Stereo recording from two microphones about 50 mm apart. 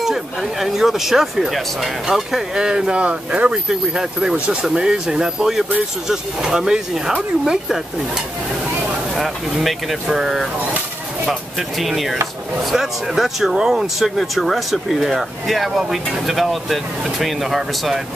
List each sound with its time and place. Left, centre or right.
0.0 s speech: centre; by 3.5 s right
3.6 s speech: centre
9.1 s speech: centre
11.8 s speech: centre